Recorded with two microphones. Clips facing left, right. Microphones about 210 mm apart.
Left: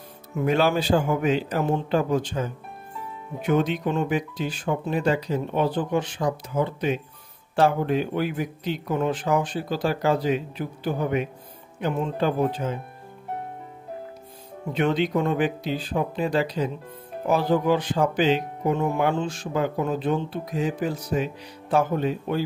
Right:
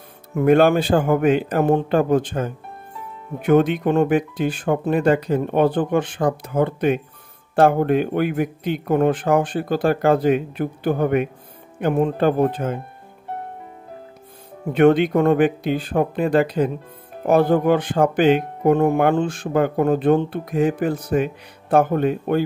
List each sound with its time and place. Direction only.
0.4 s speech: 55° right (ahead or behind)
14.7 s speech: 55° right (ahead or behind)